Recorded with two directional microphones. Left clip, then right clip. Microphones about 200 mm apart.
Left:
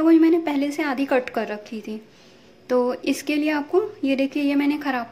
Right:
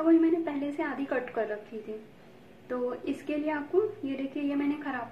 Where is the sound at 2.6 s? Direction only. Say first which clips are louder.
Left 11 dB; 60° left (ahead or behind).